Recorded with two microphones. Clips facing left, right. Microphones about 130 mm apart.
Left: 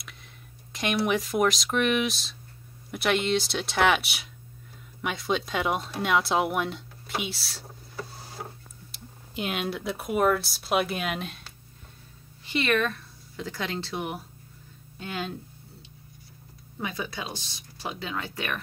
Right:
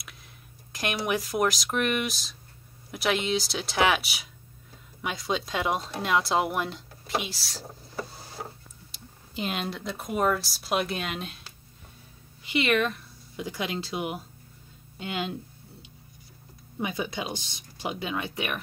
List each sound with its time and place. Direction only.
0.7 s speech: centre (ahead or behind)
8.9 s speech: centre (ahead or behind)
12.4 s speech: 15° right (ahead or behind)
16.8 s speech: 20° right (ahead or behind)